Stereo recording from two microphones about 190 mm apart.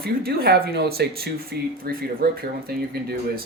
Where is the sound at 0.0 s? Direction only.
55° right (ahead or behind).